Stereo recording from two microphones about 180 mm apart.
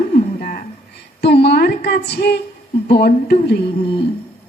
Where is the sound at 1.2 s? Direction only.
65° left (ahead or behind).